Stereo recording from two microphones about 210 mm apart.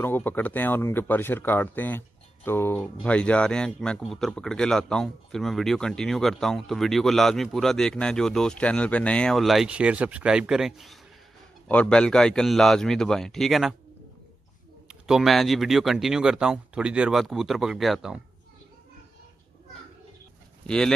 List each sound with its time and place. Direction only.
0.0 s speech: 10° left (ahead or behind)
14.9 s speech: centre (ahead or behind)
20.6 s speech: 5° left (ahead or behind)